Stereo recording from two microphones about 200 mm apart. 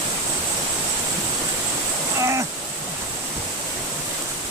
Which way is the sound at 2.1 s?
15° right (ahead or behind).